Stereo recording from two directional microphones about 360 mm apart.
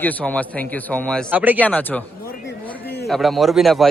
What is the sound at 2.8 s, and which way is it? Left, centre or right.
Speech, left.